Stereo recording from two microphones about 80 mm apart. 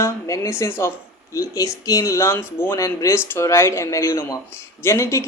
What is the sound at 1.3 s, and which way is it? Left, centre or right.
Speech, left.